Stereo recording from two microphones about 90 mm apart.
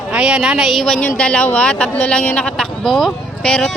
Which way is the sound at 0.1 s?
10° right (ahead or behind).